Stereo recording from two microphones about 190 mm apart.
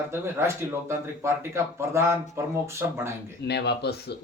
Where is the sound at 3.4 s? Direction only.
60° left (ahead or behind).